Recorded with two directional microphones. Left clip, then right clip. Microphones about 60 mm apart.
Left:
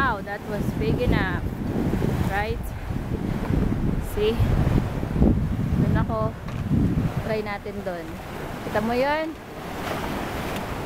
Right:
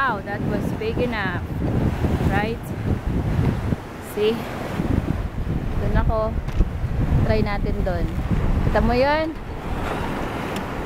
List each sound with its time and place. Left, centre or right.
0.0 s vehicle: centre
0.8 s speech: centre
4.2 s speech: centre
7.2 s speech: right
9.8 s waves: left